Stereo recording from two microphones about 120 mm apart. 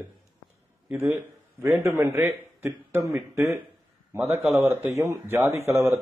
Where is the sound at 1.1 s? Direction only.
20° right (ahead or behind).